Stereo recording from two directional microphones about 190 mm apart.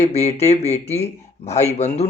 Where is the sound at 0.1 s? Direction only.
35° left (ahead or behind).